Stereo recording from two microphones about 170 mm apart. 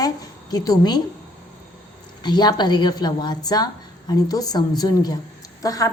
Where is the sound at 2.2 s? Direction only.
25° left (ahead or behind).